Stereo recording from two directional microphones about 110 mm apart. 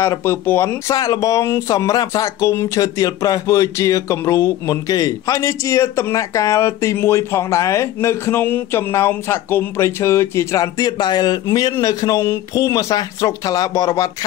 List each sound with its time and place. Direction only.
0.0 s speech: 25° left (ahead or behind)